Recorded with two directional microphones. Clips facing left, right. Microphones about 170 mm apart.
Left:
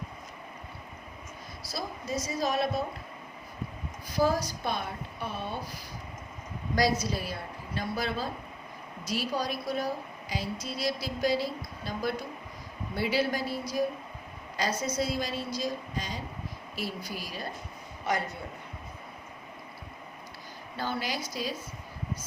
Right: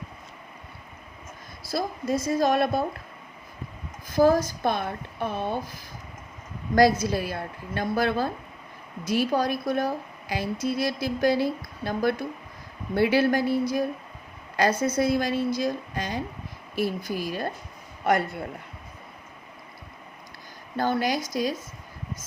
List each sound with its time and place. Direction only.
1.6 s a woman's voice: 55° right (ahead or behind)
4.1 s a woman's voice: 50° right (ahead or behind)
20.7 s speech: 50° right (ahead or behind)